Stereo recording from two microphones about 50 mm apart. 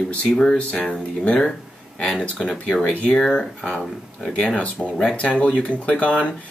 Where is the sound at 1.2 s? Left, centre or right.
Left.